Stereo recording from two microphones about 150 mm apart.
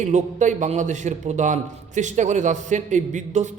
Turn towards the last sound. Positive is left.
turn(degrees=-55)  # may be behind; listen again after turning